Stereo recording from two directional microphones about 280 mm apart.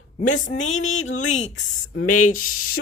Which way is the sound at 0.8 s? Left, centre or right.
Left.